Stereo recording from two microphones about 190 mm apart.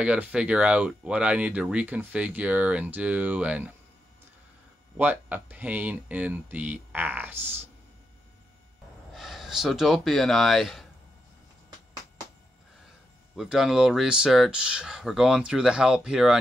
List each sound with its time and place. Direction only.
0.0 s speech: 5° right (ahead or behind)
4.9 s speech: 10° right (ahead or behind)
9.1 s speech: centre (ahead or behind)
13.4 s speech: centre (ahead or behind)